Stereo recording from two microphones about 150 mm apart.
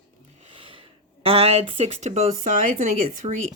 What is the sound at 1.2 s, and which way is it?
Speech, 40° right (ahead or behind).